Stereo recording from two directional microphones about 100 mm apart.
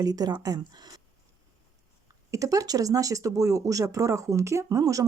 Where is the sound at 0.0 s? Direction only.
40° right (ahead or behind).